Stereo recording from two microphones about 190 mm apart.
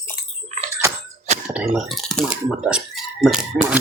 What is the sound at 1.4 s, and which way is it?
Speech, centre (ahead or behind).